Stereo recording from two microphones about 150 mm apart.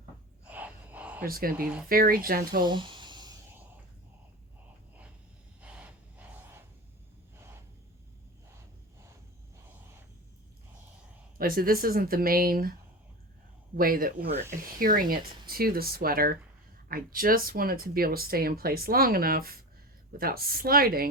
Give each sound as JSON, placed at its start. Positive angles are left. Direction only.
{"t": 0.4, "sound": "a sound", "side_deg": -10}
{"t": 1.2, "sound": "speech", "side_deg": -75}
{"t": 1.6, "sound": "speech", "side_deg": -5}
{"t": 1.9, "sound": "speech", "side_deg": -75}
{"t": 2.6, "sound": "a sound", "side_deg": -30}
{"t": 5.5, "sound": "gasp", "side_deg": -10}
{"t": 11.3, "sound": "speech", "side_deg": -75}
{"t": 13.7, "sound": "speech", "side_deg": -70}